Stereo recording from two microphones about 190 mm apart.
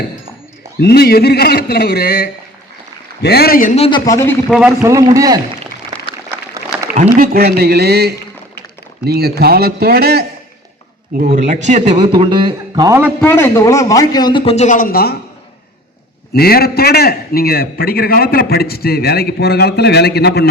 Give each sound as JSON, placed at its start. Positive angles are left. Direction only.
{"t": 0.8, "sound": "a man's voice", "side_deg": 60}
{"t": 3.8, "sound": "a man's voice", "side_deg": 20}
{"t": 4.8, "sound": "a man's voice", "side_deg": -15}
{"t": 6.9, "sound": "a man's voice", "side_deg": -45}
{"t": 11.2, "sound": "a man's voice", "side_deg": -45}
{"t": 13.2, "sound": "a man's voice", "side_deg": 15}
{"t": 16.3, "sound": "a man's voice", "side_deg": 55}